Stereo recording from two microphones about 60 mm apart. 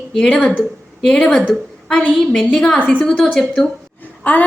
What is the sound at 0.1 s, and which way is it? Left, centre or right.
A woman's voice, centre.